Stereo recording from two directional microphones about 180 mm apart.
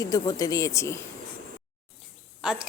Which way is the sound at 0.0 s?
20° left (ahead or behind).